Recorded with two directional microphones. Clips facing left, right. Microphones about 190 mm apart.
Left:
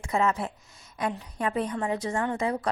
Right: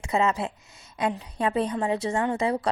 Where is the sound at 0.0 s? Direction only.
20° right (ahead or behind).